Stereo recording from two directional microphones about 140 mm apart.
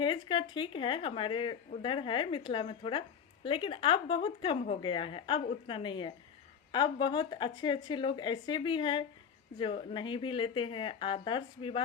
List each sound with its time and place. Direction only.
0.0 s speech: 35° left (ahead or behind)